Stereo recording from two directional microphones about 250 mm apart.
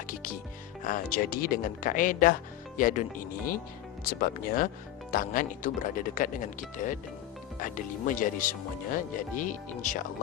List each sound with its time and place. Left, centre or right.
0.1 s music: left
0.9 s speech: left